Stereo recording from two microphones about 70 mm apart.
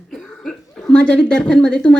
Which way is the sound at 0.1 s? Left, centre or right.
Centre.